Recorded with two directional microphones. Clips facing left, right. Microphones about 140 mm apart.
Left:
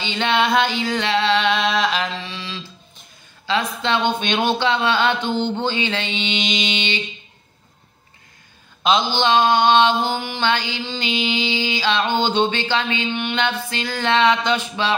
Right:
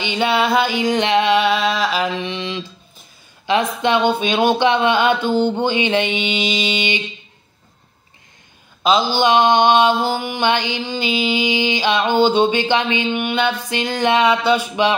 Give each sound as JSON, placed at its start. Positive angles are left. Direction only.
{"t": 0.0, "sound": "mantra", "side_deg": -10}
{"t": 8.8, "sound": "mantra", "side_deg": -5}